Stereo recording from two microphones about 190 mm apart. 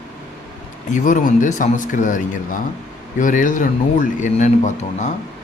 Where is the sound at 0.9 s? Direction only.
40° left (ahead or behind).